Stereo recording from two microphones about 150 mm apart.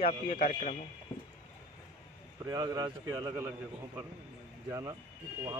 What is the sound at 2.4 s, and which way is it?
Speech, 25° right (ahead or behind).